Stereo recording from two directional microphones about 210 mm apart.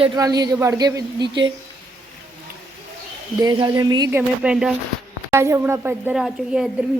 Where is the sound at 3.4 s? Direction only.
20° right (ahead or behind).